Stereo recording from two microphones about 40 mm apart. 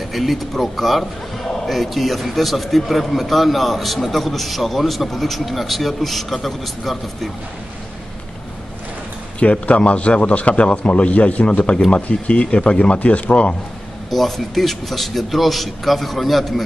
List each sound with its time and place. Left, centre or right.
0.1 s a man's voice: centre
9.4 s a man's voice: left
14.1 s a man's voice: centre